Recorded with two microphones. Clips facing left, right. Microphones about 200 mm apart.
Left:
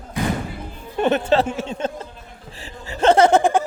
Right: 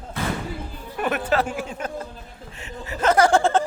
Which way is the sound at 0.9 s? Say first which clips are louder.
Left 5 dB; 25° left (ahead or behind).